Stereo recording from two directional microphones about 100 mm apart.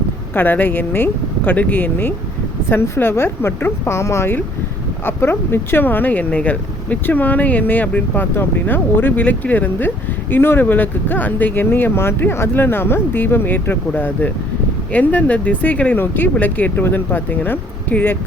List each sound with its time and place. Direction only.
0.3 s speech: 20° left (ahead or behind)